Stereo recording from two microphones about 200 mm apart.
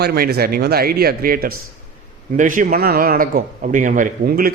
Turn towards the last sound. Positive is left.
turn(degrees=-45)  # may be behind; listen again after turning